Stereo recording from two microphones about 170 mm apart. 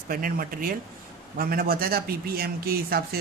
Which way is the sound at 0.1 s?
55° right (ahead or behind).